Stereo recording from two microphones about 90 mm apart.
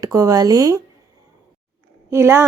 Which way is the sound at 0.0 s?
35° right (ahead or behind).